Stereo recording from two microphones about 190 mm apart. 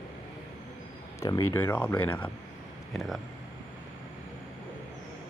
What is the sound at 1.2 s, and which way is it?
Speech, 20° left (ahead or behind).